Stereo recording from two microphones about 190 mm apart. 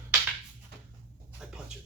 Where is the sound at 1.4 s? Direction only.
5° right (ahead or behind).